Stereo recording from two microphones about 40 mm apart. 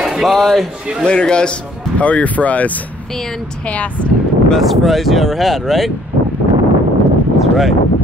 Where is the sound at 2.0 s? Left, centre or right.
Left.